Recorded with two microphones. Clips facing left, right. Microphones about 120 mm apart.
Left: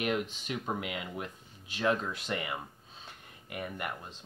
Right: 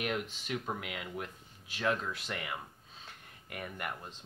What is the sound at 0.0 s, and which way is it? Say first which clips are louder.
Speech: left 4 dB; 15° left (ahead or behind).